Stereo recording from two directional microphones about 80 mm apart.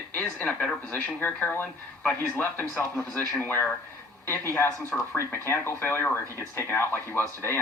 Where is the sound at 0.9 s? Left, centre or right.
Centre.